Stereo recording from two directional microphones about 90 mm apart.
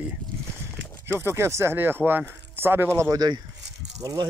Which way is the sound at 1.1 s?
25° right (ahead or behind).